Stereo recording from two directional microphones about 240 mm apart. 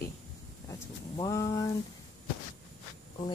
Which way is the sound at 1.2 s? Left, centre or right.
Centre.